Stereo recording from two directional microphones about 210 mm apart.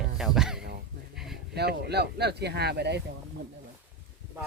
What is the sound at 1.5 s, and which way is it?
Speech, 50° right (ahead or behind).